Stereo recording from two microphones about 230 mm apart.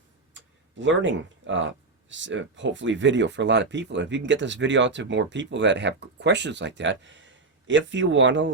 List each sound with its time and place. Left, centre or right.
0.8 s speech: right